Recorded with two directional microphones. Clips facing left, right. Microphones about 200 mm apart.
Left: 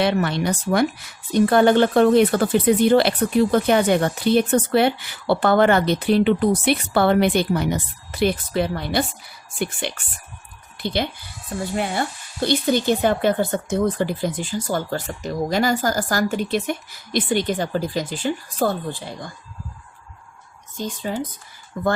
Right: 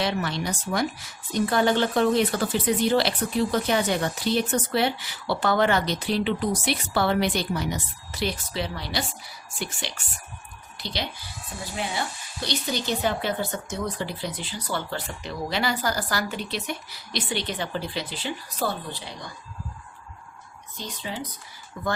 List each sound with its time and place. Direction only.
0.0 s speech: 60° left (ahead or behind)
20.7 s speech: 50° left (ahead or behind)